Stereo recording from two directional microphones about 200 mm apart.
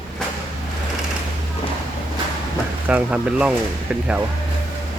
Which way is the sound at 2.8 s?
5° right (ahead or behind).